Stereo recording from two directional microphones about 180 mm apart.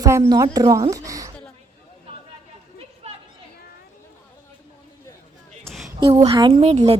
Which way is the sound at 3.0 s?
35° right (ahead or behind).